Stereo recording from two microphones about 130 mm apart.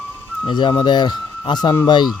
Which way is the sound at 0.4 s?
35° left (ahead or behind).